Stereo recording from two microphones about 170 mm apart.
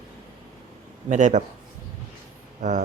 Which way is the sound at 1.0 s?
45° right (ahead or behind).